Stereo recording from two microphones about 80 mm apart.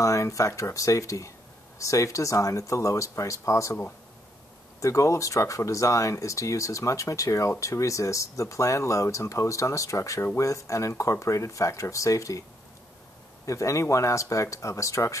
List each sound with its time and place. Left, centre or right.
0.0 s speech: left
4.7 s speech: left
13.5 s speech: left